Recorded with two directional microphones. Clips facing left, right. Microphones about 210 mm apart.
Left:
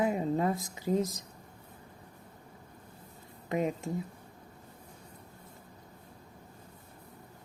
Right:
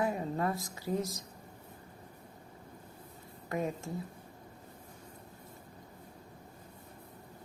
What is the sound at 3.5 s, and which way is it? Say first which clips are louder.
Speech: left 4 dB; 20° left (ahead or behind).